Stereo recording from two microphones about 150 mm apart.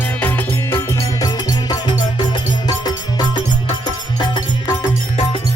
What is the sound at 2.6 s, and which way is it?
Music, 25° left (ahead or behind).